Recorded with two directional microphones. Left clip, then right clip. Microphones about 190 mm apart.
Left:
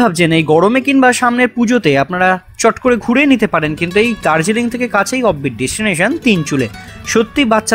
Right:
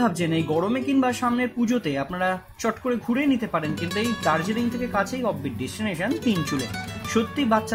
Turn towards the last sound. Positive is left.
turn(degrees=45)  # may be behind; listen again after turning